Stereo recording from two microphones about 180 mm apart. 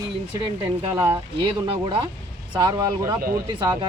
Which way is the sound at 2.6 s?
20° right (ahead or behind).